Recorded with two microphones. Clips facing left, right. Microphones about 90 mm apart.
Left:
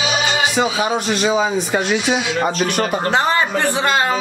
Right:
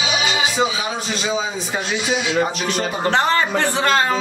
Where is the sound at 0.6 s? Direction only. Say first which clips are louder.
Left 3 dB; 65° left (ahead or behind).